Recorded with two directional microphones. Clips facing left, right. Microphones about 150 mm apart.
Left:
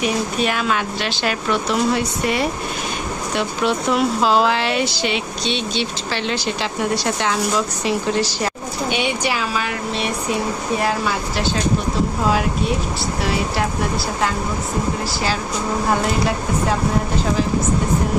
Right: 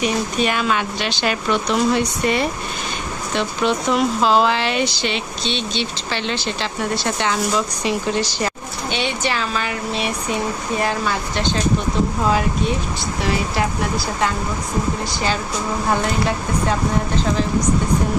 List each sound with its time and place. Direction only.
0.0 s speech: centre (ahead or behind)
16.0 s speech: centre (ahead or behind)